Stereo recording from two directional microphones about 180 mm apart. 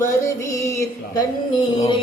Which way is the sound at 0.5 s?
15° left (ahead or behind).